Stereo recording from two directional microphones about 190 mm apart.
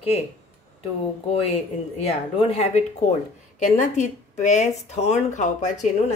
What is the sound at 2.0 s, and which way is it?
Speech, 35° left (ahead or behind).